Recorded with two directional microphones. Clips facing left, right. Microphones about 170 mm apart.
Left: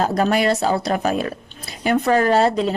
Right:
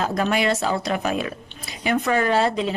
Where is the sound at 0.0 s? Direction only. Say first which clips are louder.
Left 4 dB; 40° left (ahead or behind).